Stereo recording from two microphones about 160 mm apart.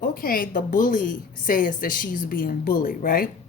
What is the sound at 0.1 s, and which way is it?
A woman's voice, 65° left (ahead or behind).